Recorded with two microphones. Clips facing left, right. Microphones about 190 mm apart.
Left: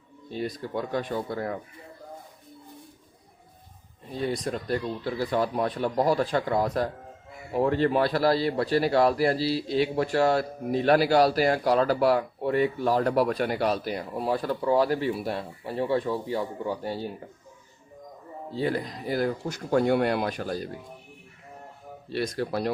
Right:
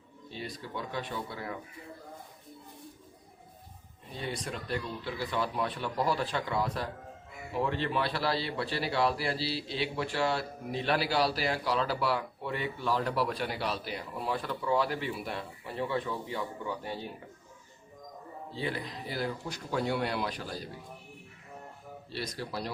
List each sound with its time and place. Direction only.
0.3 s speech: 45° left (ahead or behind)
4.1 s speech: 40° left (ahead or behind)
18.5 s speech: 45° left (ahead or behind)
22.1 s speech: 55° left (ahead or behind)